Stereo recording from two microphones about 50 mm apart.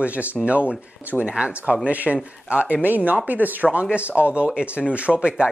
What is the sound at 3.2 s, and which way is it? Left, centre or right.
Speech, right.